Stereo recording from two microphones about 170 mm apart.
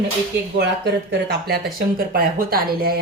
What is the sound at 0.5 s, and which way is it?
Speech, 80° right.